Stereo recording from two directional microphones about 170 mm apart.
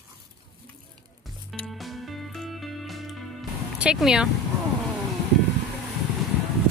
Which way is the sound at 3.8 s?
5° right (ahead or behind).